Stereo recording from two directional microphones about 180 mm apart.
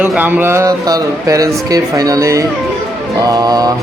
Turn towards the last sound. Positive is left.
turn(degrees=-20)  # may be behind; listen again after turning